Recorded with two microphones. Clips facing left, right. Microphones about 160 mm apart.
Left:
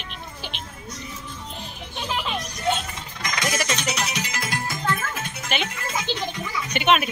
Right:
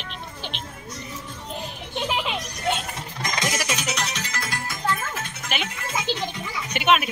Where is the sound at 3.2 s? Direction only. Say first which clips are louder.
Right 1 dB; 25° right (ahead or behind).